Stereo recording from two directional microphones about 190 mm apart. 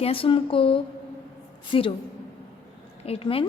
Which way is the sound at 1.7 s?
25° left (ahead or behind).